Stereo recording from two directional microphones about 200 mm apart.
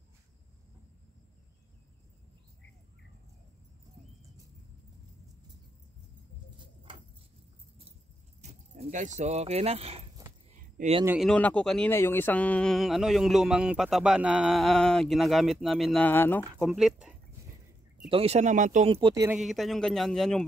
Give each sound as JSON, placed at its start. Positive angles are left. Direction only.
{"t": 6.6, "sound": "vehicle", "side_deg": -25}
{"t": 8.4, "sound": "speech", "side_deg": -35}
{"t": 11.1, "sound": "speech", "side_deg": 0}
{"t": 18.1, "sound": "speech", "side_deg": -30}
{"t": 18.9, "sound": "speech", "side_deg": -20}
{"t": 19.3, "sound": "speech", "side_deg": 0}